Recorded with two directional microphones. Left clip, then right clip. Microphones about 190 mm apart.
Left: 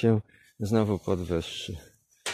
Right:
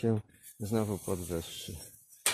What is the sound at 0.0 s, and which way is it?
Speech, 40° left (ahead or behind).